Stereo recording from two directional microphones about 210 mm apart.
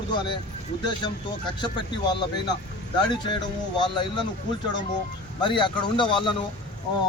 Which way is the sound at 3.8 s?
20° left (ahead or behind).